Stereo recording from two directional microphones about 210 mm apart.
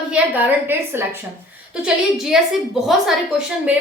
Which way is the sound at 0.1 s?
10° right (ahead or behind).